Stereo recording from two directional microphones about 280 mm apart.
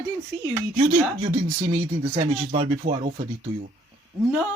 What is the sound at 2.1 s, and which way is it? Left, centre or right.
Speech, right.